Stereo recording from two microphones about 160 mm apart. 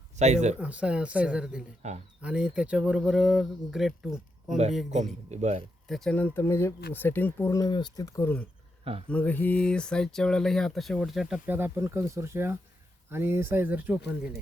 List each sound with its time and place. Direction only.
0.2 s speech: 45° right (ahead or behind)
0.6 s speech: 5° right (ahead or behind)
1.8 s speech: 45° right (ahead or behind)
2.2 s speech: 5° right (ahead or behind)
5.3 s speech: 45° right (ahead or behind)
5.9 s speech: 5° left (ahead or behind)
8.8 s speech: 35° right (ahead or behind)
9.0 s speech: 10° left (ahead or behind); by 13.9 s 10° right (ahead or behind)